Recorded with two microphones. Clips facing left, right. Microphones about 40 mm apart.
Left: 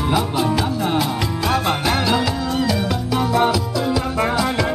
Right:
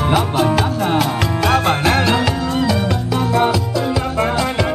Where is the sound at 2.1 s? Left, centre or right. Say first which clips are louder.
Right 2 dB; centre.